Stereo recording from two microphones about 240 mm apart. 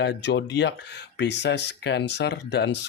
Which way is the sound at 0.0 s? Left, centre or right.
Left.